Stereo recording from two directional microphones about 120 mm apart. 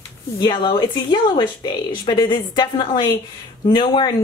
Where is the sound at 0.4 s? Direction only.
40° left (ahead or behind).